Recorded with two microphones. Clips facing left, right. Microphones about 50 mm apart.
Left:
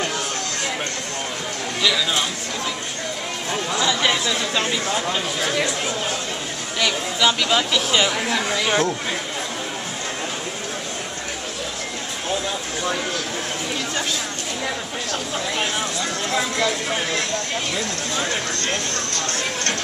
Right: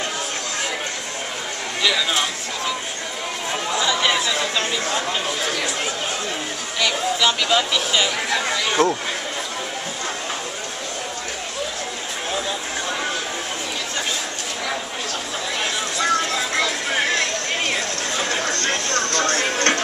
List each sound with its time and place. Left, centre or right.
1.8 s speech: centre
3.7 s chatter: centre
4.6 s speech: centre
6.8 s speech: centre
17.1 s a sound: right